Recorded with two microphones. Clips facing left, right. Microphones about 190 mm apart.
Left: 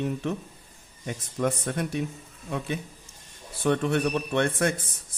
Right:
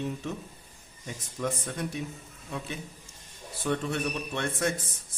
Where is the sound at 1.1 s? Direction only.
60° left (ahead or behind).